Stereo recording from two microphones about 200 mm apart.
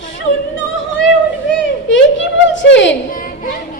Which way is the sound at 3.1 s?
45° left (ahead or behind).